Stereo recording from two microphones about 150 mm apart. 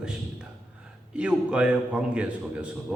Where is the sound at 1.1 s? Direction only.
5° right (ahead or behind).